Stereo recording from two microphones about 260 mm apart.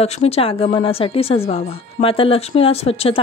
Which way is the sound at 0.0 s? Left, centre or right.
Left.